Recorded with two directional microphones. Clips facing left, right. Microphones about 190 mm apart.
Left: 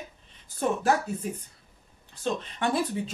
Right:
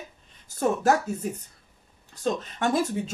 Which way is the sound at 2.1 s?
40° right (ahead or behind).